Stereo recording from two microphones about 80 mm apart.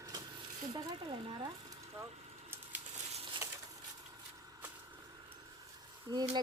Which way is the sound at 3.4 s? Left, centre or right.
Right.